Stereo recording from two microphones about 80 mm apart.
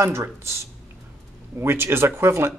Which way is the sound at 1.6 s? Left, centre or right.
Right.